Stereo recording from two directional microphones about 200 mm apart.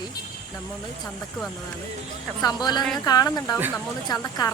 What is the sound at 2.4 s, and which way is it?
A woman's voice, 20° left (ahead or behind).